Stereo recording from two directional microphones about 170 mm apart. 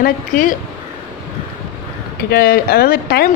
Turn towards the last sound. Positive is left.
turn(degrees=60)  # may be behind; listen again after turning